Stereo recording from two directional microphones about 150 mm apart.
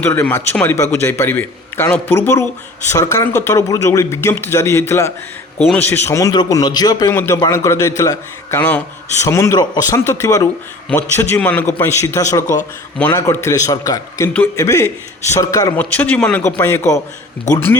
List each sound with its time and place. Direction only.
0.0 s a man's voice: 15° left (ahead or behind)
7.1 s a man's voice: 15° left (ahead or behind)
15.7 s a man's voice: 10° left (ahead or behind)